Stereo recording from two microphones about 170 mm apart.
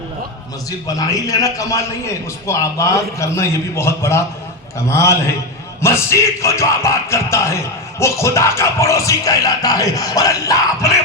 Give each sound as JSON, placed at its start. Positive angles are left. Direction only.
{"t": 0.9, "sound": "music", "side_deg": 20}